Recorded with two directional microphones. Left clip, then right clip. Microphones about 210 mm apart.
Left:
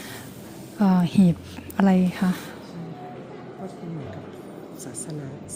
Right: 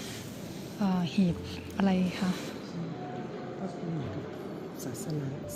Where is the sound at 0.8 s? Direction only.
45° left (ahead or behind).